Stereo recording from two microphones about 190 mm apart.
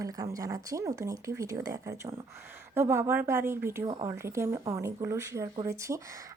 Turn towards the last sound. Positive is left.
turn(degrees=-15)  # may be behind; listen again after turning